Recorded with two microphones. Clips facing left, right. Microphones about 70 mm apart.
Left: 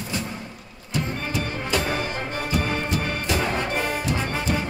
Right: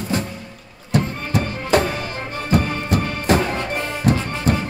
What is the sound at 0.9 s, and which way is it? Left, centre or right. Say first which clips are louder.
Music: right 6 dB; right.